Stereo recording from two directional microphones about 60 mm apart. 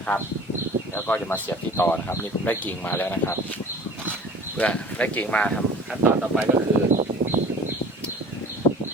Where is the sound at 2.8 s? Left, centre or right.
Left.